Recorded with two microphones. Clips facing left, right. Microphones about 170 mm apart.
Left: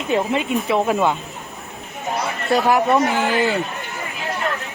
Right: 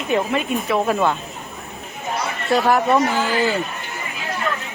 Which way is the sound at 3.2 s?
20° left (ahead or behind).